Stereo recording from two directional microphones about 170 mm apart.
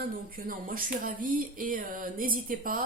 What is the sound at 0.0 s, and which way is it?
A woman's voice, 55° right (ahead or behind).